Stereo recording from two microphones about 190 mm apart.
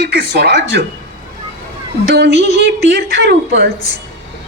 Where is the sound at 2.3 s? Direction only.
40° left (ahead or behind).